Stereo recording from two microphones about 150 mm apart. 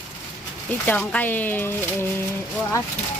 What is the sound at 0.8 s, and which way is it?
Speech, 10° left (ahead or behind).